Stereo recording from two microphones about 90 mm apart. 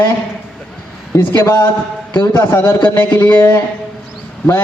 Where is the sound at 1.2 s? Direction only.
30° left (ahead or behind).